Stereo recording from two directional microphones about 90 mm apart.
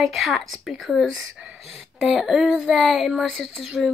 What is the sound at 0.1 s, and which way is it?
Speech, centre (ahead or behind).